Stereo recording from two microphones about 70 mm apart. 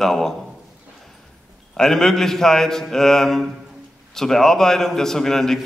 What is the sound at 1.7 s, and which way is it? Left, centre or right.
A man's voice, centre.